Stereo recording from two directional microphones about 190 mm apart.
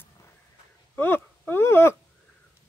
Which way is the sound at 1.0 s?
10° left (ahead or behind).